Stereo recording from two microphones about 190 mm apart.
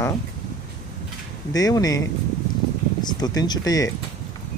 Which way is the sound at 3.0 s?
20° left (ahead or behind).